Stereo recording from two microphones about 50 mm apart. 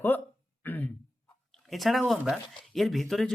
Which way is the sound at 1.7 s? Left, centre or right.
Centre.